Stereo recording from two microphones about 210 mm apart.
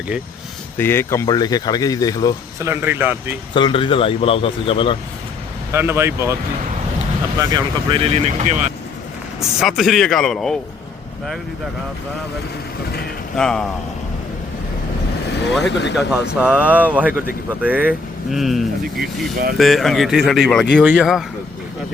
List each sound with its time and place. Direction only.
0.8 s speech: 10° left (ahead or behind)
2.6 s speech: 10° right (ahead or behind)
3.5 s speech: 25° left (ahead or behind)
5.7 s speech: 10° right (ahead or behind)
7.5 s speech: 25° right (ahead or behind)
9.4 s speech: centre (ahead or behind)
13.3 s speech: 5° left (ahead or behind)
15.7 s speech: 55° left (ahead or behind)
16.0 s speech: 5° right (ahead or behind)
18.9 s speech: 45° right (ahead or behind)
19.5 s speech: centre (ahead or behind)